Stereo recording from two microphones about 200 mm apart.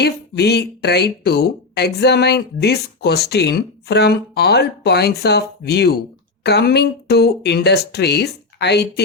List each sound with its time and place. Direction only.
0.0 s speech: 55° left (ahead or behind)